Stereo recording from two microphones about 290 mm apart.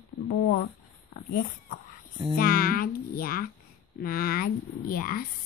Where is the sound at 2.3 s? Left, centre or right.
Left.